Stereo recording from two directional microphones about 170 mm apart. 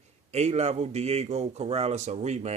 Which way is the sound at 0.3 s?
40° right (ahead or behind).